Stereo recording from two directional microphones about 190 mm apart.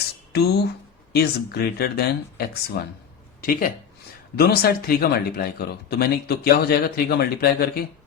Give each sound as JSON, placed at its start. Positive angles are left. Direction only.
{"t": 0.3, "sound": "speech", "side_deg": 60}